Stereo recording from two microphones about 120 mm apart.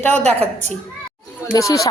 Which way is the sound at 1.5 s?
30° left (ahead or behind).